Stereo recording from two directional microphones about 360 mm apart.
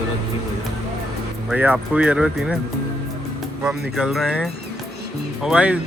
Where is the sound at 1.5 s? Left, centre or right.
Centre.